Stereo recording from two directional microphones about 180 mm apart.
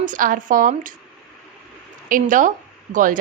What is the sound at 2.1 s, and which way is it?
A woman's voice, 45° right (ahead or behind).